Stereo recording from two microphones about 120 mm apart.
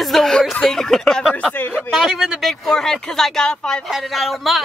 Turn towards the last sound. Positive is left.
turn(degrees=0)  # may be behind; listen again after turning